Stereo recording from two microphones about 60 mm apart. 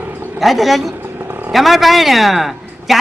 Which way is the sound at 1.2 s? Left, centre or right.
Right.